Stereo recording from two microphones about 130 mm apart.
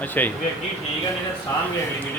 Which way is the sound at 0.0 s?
15° left (ahead or behind).